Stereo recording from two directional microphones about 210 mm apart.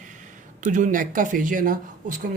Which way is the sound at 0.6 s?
35° right (ahead or behind).